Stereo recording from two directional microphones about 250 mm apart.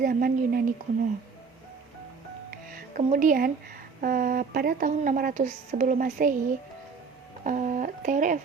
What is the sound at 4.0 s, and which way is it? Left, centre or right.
Speech, right.